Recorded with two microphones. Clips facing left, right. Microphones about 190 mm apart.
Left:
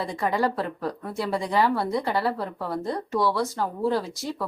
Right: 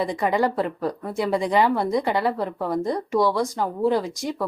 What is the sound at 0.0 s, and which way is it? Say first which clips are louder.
Speech: right 3 dB; 20° right (ahead or behind).